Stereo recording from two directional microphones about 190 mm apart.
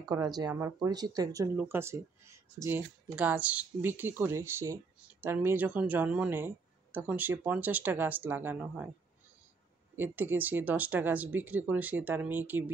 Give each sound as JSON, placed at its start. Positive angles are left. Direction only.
{"t": 0.1, "sound": "speech", "side_deg": -20}
{"t": 9.9, "sound": "speech", "side_deg": -10}